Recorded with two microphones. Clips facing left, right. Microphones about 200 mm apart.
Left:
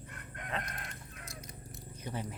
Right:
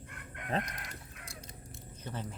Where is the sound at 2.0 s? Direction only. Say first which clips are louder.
Left 2 dB; 10° left (ahead or behind).